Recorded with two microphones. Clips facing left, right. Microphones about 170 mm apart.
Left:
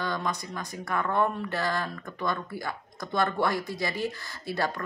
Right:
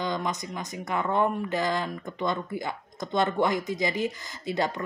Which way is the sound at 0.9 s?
15° right (ahead or behind).